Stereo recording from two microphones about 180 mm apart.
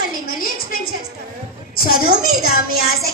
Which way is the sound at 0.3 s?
55° left (ahead or behind).